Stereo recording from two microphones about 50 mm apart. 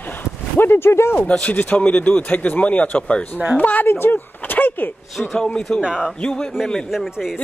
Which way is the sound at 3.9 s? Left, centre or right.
Left.